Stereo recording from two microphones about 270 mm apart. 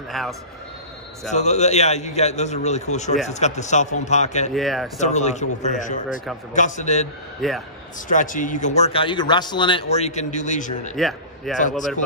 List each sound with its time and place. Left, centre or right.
0.1 s speech: centre
1.3 s speech: left
4.6 s speech: centre
4.9 s speech: left
7.4 s speech: centre
8.1 s speech: left
11.0 s a man's voice: centre